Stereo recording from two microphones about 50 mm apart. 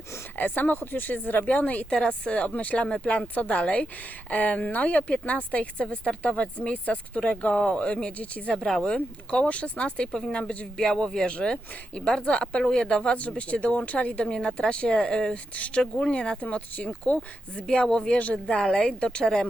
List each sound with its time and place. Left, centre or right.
0.3 s speech: left
1.9 s speech: centre
8.5 s speech: centre
10.1 s speech: centre
10.3 s speech: left
10.8 s speech: centre